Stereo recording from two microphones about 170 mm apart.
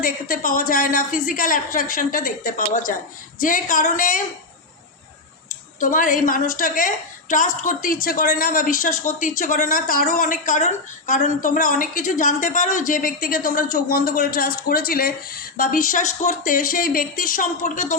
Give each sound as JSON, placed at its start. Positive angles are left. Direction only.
{"t": 0.0, "sound": "a woman's voice", "side_deg": 55}
{"t": 5.5, "sound": "speech", "side_deg": 50}